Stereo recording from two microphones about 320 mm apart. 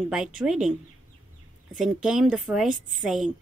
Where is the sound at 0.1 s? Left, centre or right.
Centre.